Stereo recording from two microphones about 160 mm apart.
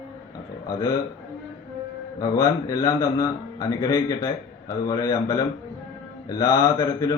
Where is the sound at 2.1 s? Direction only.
20° left (ahead or behind).